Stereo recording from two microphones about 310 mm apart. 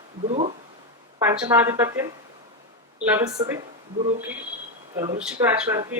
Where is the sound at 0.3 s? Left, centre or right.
Right.